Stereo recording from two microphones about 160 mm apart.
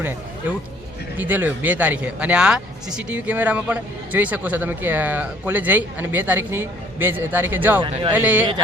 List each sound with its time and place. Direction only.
1.1 s speech: 10° right (ahead or behind)
7.8 s speech: 35° right (ahead or behind)
8.1 s speech: 10° right (ahead or behind)